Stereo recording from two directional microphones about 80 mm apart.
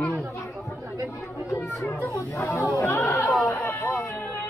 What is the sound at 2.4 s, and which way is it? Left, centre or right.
Speech, left.